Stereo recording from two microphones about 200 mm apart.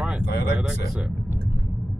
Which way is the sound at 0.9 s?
Centre (ahead or behind).